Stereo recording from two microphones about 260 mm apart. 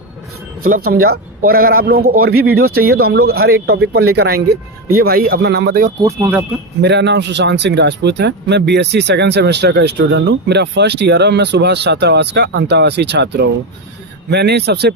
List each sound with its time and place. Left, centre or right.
0.8 s speech: right
1.0 s speech: right
6.0 s speech: centre
6.8 s speech: right